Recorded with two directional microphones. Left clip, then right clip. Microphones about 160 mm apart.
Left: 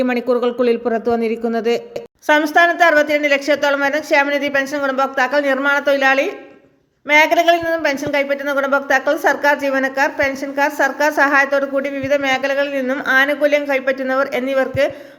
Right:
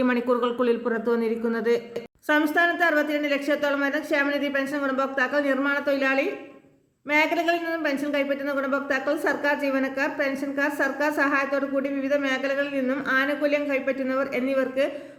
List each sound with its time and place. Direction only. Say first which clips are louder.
0.0 s speech: left 6 dB; 25° left (ahead or behind)
2.2 s speech: left 9 dB; centre (ahead or behind)